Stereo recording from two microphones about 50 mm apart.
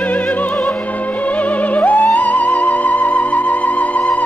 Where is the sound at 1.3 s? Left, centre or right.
Left.